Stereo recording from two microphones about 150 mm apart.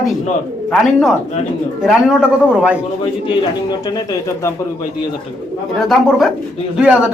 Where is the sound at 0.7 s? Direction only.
5° left (ahead or behind).